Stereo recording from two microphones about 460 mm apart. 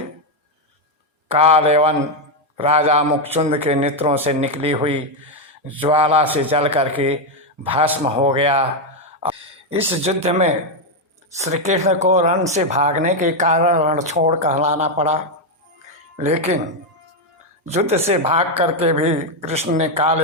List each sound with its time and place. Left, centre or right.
1.3 s speech: centre
17.7 s speech: centre